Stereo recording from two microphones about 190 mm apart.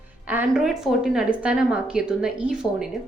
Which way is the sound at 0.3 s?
5° right (ahead or behind).